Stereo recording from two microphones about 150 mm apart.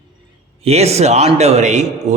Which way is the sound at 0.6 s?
45° right (ahead or behind).